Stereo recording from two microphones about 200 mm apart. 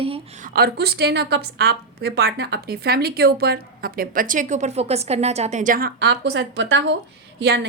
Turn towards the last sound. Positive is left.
turn(degrees=-60)  # may be behind; listen again after turning